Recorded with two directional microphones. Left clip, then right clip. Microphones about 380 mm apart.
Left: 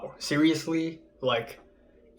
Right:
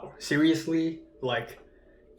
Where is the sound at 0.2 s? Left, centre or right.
Centre.